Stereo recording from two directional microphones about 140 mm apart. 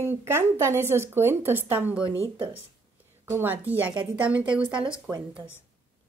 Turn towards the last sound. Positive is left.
turn(degrees=-5)  # may be behind; listen again after turning